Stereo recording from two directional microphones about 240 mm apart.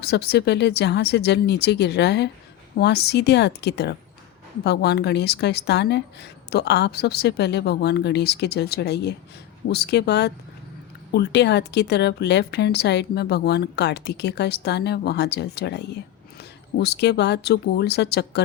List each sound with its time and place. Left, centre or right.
0.0 s speech: left